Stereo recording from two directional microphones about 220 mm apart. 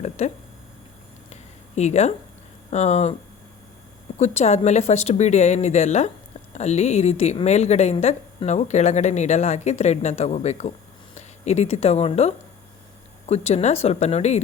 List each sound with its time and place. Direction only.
0.2 s a woman's voice: 30° left (ahead or behind)
1.3 s a sound: 30° left (ahead or behind)
2.6 s a woman's voice: 30° left (ahead or behind)
4.2 s a woman's voice: 30° left (ahead or behind)